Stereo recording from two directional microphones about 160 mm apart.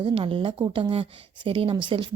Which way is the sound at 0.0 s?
35° right (ahead or behind).